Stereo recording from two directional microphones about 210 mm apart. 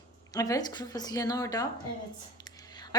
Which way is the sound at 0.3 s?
15° left (ahead or behind).